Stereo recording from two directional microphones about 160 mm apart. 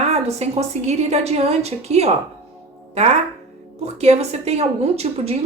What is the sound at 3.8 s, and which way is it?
A woman's voice, 40° right (ahead or behind).